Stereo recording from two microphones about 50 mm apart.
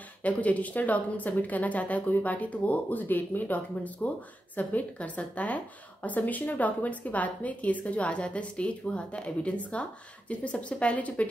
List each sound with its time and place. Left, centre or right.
0.2 s a woman's voice: left